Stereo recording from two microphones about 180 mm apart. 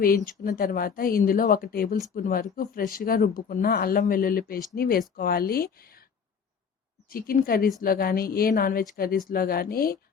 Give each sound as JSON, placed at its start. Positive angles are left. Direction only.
{"t": 0.3, "sound": "speech", "side_deg": 55}
{"t": 7.1, "sound": "speech", "side_deg": 55}